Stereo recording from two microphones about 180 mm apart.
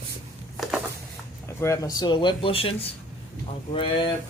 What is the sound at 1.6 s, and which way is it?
Speech, 20° left (ahead or behind).